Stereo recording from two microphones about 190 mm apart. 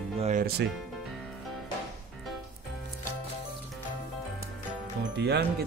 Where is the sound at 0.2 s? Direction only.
40° right (ahead or behind).